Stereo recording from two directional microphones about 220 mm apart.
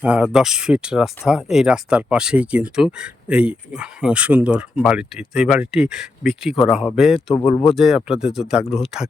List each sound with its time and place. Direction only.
0.0 s speech: 5° right (ahead or behind)
7.4 s speech: 25° left (ahead or behind)
7.8 s speech: centre (ahead or behind)